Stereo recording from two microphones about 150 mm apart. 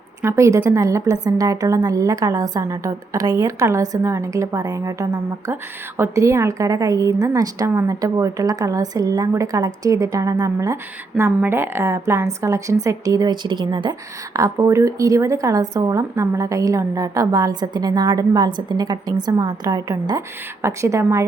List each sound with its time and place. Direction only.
0.2 s a woman's voice: 20° right (ahead or behind)